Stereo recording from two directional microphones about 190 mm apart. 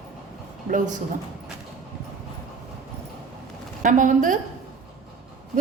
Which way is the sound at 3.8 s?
40° right (ahead or behind).